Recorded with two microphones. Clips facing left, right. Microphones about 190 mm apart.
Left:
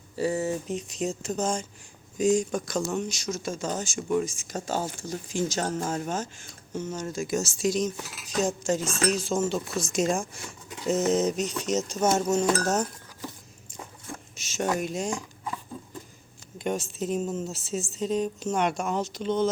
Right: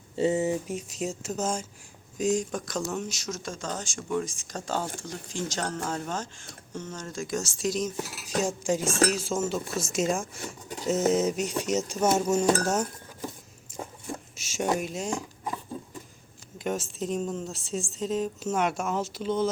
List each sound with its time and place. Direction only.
0.2 s a woman's voice: 20° right (ahead or behind); by 10.2 s 5° right (ahead or behind)
10.4 s a sound: 40° right (ahead or behind)
10.8 s a woman's voice: 10° right (ahead or behind)
14.3 s speech: 10° right (ahead or behind)
16.6 s a woman's voice: centre (ahead or behind)